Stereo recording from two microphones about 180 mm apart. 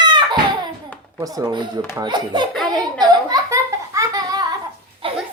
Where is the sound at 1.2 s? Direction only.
20° right (ahead or behind).